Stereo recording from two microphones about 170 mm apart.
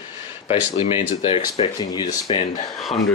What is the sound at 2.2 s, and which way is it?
Speech, 35° left (ahead or behind).